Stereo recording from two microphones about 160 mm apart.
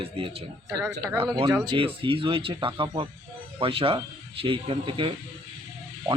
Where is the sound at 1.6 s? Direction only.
30° right (ahead or behind).